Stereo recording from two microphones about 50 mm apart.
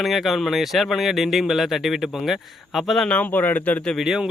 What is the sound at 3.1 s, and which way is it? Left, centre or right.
Speech, left.